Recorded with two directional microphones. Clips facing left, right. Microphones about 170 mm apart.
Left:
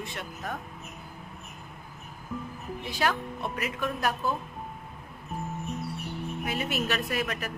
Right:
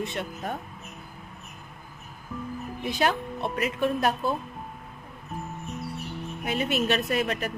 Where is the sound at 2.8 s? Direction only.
20° right (ahead or behind).